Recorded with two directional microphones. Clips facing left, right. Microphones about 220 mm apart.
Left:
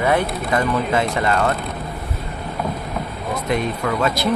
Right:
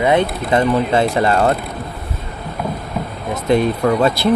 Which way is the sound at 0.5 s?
30° right (ahead or behind).